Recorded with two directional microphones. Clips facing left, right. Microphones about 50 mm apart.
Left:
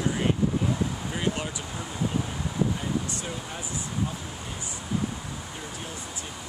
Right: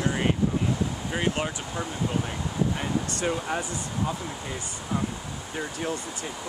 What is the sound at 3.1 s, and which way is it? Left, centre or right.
Speech, right.